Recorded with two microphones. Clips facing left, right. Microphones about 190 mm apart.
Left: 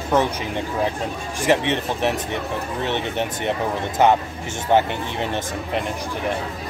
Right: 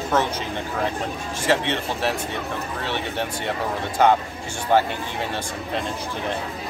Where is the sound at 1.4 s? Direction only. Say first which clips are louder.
Left 3 dB; 15° left (ahead or behind).